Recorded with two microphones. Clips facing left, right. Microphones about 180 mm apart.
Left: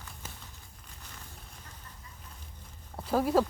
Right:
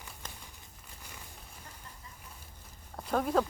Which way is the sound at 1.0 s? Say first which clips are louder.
Even; 10° right (ahead or behind).